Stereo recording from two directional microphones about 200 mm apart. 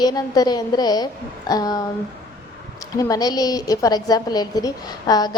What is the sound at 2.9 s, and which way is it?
A woman's voice, 15° left (ahead or behind).